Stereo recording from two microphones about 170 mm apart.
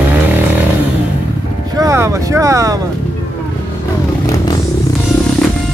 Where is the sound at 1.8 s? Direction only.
15° right (ahead or behind).